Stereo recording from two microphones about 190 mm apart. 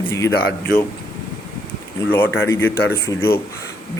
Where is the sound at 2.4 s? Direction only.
15° left (ahead or behind).